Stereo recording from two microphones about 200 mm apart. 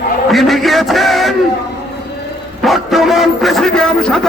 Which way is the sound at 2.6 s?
Centre (ahead or behind).